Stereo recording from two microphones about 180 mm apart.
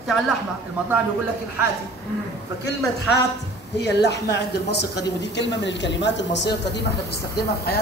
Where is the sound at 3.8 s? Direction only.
70° left (ahead or behind).